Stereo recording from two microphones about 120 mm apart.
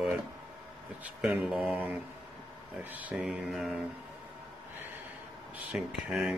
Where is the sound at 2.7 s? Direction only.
15° right (ahead or behind).